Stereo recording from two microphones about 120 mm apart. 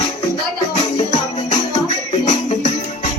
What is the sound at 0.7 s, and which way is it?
Music, 70° left (ahead or behind).